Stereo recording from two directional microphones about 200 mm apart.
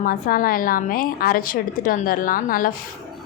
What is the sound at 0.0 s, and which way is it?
A woman's voice, 45° left (ahead or behind).